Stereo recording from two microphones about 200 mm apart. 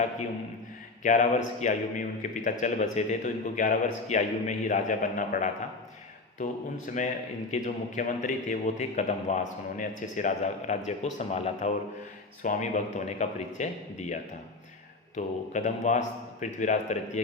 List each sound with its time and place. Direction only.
1.0 s a man's voice: 40° left (ahead or behind)
6.9 s a man's voice: 40° left (ahead or behind)
15.1 s a man's voice: 35° left (ahead or behind)